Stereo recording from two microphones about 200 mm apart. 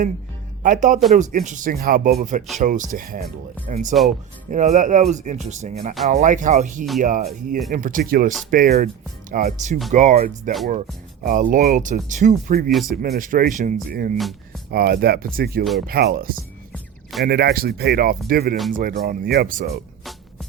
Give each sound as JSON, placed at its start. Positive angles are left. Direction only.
{"t": 0.6, "sound": "speech", "side_deg": -40}
{"t": 16.7, "sound": "music", "side_deg": 0}
{"t": 17.2, "sound": "speech", "side_deg": -50}